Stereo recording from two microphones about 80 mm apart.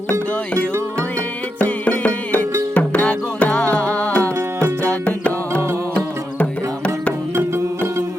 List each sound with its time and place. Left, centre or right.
1.5 s music: centre
4.2 s music: right
4.8 s music: centre
7.3 s music: right